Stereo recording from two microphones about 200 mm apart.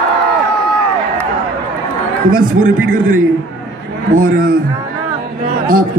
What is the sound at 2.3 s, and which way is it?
Speech, 45° right (ahead or behind).